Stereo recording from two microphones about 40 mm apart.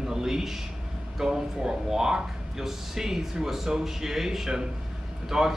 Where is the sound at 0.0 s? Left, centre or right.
Centre.